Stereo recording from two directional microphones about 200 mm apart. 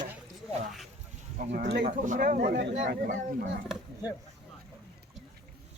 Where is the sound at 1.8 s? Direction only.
40° right (ahead or behind).